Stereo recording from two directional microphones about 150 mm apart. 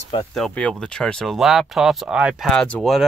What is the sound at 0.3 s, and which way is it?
Speech, 5° left (ahead or behind).